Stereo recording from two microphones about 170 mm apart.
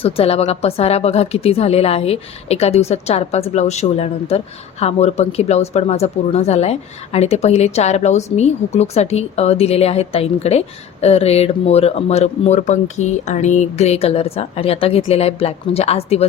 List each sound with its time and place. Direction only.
0.0 s a woman's voice: 35° left (ahead or behind)